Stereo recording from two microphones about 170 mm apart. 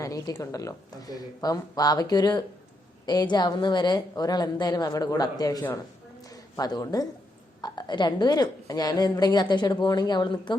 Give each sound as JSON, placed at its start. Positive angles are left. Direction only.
{"t": 0.0, "sound": "a woman's voice", "side_deg": 20}